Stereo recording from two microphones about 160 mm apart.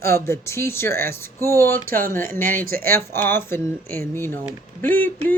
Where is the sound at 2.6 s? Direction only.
65° right (ahead or behind).